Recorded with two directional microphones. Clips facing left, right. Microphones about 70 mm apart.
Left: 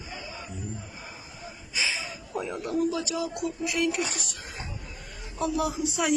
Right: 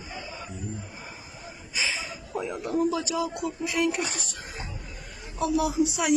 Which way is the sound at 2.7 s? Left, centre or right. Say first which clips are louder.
Right 2 dB; right.